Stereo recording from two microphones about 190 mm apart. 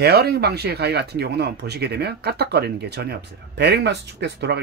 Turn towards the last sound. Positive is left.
turn(degrees=-65)  # may be behind; listen again after turning